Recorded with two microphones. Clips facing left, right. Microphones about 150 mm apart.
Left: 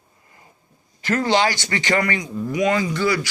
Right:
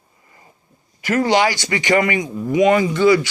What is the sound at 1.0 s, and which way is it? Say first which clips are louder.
A man's voice: right 3 dB; 15° right (ahead or behind).